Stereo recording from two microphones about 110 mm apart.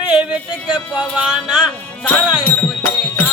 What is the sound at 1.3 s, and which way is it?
Speech, 5° right (ahead or behind).